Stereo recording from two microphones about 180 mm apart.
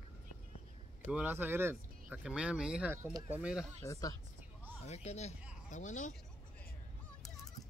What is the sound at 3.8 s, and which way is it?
Speech, 20° left (ahead or behind).